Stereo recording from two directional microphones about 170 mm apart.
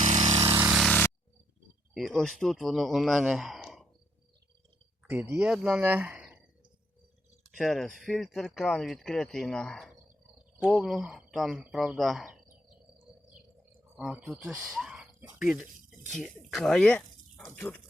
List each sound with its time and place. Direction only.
0.3 s vehicle: 35° right (ahead or behind)
0.5 s vehicle: 5° right (ahead or behind)
0.9 s a sound: 10° left (ahead or behind)
1.9 s speech: centre (ahead or behind)
5.3 s speech: 5° right (ahead or behind)
7.5 s speech: centre (ahead or behind)
13.9 s speech: 5° right (ahead or behind)